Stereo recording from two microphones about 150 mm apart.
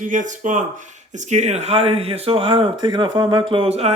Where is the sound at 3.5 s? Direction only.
40° right (ahead or behind).